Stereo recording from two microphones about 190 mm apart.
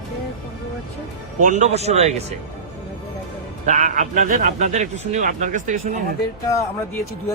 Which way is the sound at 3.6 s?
40° right (ahead or behind).